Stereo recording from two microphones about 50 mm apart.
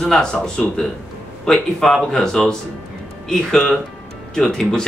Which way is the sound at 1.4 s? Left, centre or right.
Centre.